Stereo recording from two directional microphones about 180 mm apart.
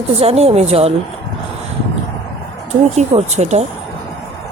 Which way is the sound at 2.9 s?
40° right (ahead or behind).